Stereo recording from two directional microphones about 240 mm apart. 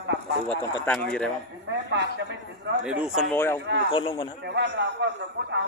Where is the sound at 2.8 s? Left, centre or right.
Centre.